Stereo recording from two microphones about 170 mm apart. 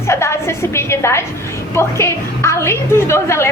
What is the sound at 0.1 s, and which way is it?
A woman's voice, 15° left (ahead or behind).